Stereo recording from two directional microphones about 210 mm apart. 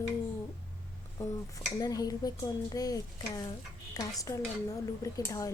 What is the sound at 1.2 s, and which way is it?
Speech, 15° left (ahead or behind).